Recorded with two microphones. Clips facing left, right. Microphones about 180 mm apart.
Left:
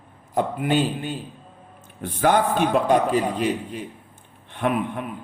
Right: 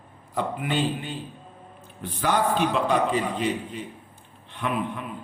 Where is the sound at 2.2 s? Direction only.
50° left (ahead or behind).